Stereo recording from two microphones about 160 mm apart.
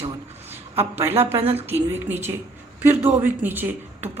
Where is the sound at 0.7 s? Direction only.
15° right (ahead or behind).